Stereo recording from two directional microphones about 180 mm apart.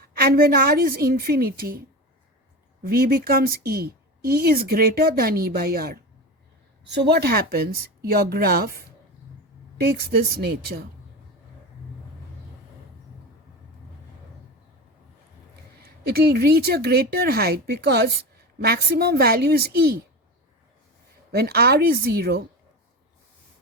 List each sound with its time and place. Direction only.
0.0 s speech: 55° right (ahead or behind)
2.8 s speech: 55° right (ahead or behind)
6.8 s speech: 70° right (ahead or behind)
10.1 s speech: 60° right (ahead or behind)
15.8 s speech: 60° right (ahead or behind)
21.3 s speech: 60° right (ahead or behind)